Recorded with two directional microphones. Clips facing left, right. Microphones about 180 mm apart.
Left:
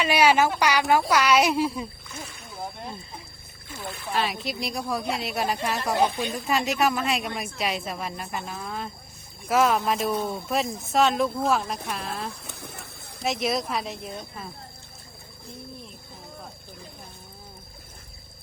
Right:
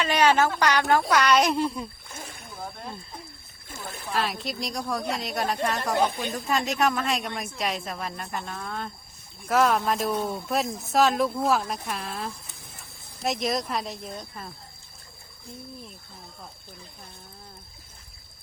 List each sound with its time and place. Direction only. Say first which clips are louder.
0.0 s a woman's voice: left 1 dB; 10° left (ahead or behind)
2.0 s splash: left 1 dB; 50° right (ahead or behind)
4.1 s a woman's voice: left 1 dB; centre (ahead or behind)
12.5 s a sound: left 8 dB; 70° left (ahead or behind)
13.2 s a woman's voice: left 1 dB; centre (ahead or behind)